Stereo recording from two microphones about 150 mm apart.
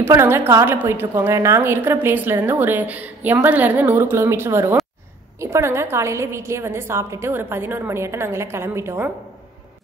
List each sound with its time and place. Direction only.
0.0 s a woman's voice: 15° right (ahead or behind)